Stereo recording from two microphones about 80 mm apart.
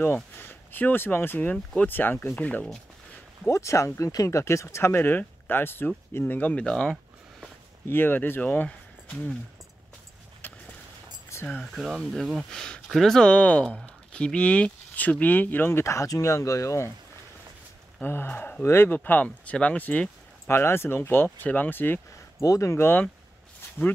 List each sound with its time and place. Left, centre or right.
0.0 s speech: left
2.3 s speech: centre
3.4 s speech: left; by 7.0 s centre
7.9 s speech: left
10.4 s a sound: left
11.4 s speech: centre
11.7 s speech: centre; by 15.8 s left
15.8 s speech: left
18.0 s speech: left
20.4 s speech: left
22.4 s speech: left